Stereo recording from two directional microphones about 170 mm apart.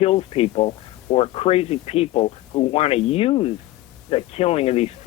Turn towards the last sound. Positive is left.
turn(degrees=35)  # may be behind; listen again after turning